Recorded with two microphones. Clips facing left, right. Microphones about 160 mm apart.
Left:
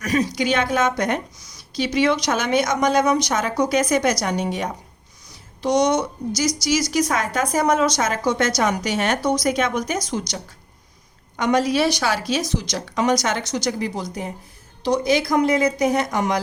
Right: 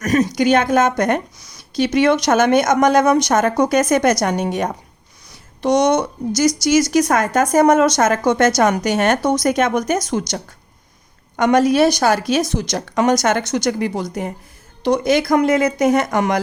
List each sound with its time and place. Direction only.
0.0 s a woman's voice: 50° right (ahead or behind)